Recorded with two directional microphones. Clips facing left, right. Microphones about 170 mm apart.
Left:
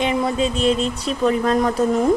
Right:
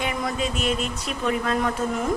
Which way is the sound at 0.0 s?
25° left (ahead or behind).